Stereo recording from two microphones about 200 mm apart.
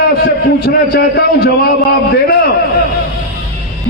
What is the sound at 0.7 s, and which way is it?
A man's voice, 50° left (ahead or behind).